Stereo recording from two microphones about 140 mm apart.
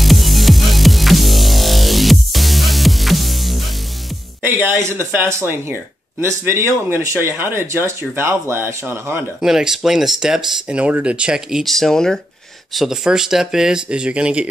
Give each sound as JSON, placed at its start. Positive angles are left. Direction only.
{"t": 0.0, "sound": "music", "side_deg": 0}
{"t": 4.4, "sound": "speech", "side_deg": -15}
{"t": 9.4, "sound": "speech", "side_deg": -5}